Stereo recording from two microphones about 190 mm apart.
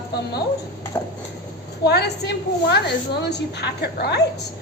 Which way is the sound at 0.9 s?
15° left (ahead or behind).